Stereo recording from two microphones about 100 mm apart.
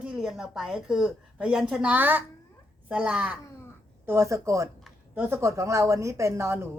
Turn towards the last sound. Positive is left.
turn(degrees=-25)  # may be behind; listen again after turning